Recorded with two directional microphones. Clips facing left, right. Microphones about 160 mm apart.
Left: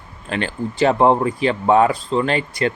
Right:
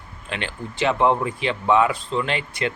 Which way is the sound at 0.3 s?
40° left (ahead or behind).